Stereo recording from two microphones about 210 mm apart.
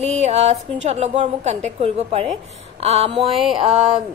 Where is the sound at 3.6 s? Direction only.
30° right (ahead or behind).